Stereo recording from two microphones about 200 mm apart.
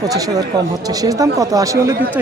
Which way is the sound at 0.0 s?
20° right (ahead or behind).